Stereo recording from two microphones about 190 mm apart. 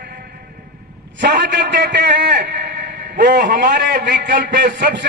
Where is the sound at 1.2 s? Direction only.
65° right (ahead or behind).